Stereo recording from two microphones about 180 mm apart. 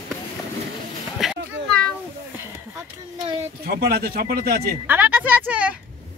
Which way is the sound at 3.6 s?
60° right (ahead or behind).